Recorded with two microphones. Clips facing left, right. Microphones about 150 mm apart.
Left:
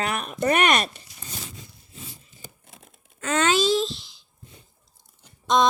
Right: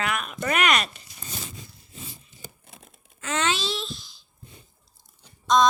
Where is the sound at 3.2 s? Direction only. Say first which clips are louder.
Left 5 dB; 50° left (ahead or behind).